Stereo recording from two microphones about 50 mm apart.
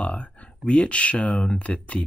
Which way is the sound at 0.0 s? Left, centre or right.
Left.